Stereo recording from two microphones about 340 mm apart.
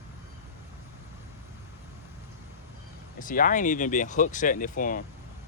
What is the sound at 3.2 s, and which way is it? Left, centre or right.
Speech, left.